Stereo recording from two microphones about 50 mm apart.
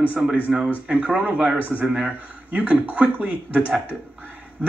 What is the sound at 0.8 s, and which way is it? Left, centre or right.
Speech, right.